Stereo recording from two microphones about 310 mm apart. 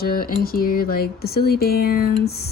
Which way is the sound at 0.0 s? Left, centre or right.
Left.